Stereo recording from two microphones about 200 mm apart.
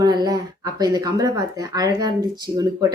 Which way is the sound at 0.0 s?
20° right (ahead or behind).